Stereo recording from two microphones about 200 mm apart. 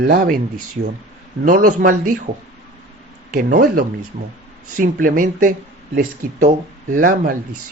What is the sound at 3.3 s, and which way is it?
Speech, 45° right (ahead or behind).